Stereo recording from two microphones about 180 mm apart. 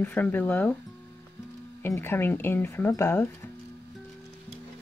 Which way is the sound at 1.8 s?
15° left (ahead or behind).